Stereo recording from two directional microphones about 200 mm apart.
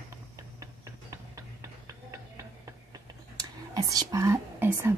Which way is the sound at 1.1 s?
15° right (ahead or behind).